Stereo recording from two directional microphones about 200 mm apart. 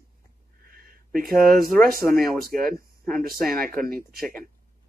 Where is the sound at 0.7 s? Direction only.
45° right (ahead or behind).